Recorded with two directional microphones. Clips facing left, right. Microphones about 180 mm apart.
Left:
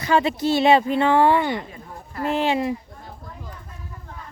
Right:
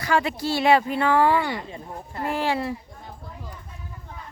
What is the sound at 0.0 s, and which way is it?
Female singing, 20° left (ahead or behind).